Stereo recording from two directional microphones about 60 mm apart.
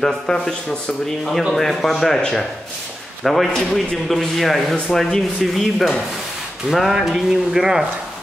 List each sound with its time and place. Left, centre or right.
0.0 s a man's voice: centre